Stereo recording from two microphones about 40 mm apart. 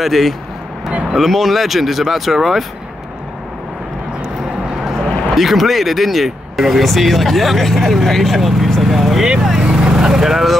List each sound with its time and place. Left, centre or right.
0.0 s speech: centre
5.3 s speech: centre
9.6 s speech: right